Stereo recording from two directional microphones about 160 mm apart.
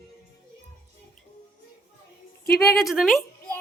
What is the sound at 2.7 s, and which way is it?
Speech, centre (ahead or behind).